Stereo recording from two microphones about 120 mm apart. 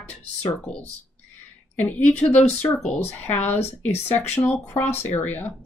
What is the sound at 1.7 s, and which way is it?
Speech, 15° left (ahead or behind).